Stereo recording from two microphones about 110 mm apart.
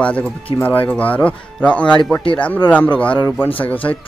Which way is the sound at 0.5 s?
40° left (ahead or behind).